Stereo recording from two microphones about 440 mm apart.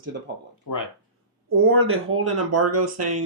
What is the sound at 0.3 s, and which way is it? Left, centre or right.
Speech, right.